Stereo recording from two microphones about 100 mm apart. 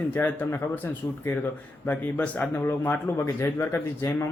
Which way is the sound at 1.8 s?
15° left (ahead or behind).